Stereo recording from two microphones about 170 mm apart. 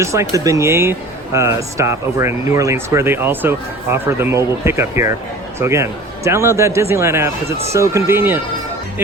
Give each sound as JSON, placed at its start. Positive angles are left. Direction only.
{"t": 0.0, "sound": "speech", "side_deg": -15}